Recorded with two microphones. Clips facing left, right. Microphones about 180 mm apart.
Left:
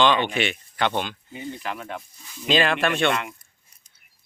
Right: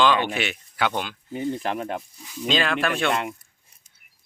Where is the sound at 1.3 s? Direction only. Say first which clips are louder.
Right 7 dB; 45° right (ahead or behind).